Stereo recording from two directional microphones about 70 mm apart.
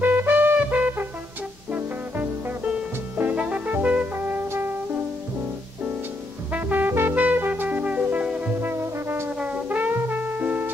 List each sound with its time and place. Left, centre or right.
0.0 s music: right
4.1 s brass instrument: right
4.5 s music: right
6.5 s music: right
8.5 s music: right
9.4 s brass instrument: right